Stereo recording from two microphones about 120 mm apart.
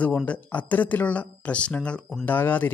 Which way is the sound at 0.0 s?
10° left (ahead or behind).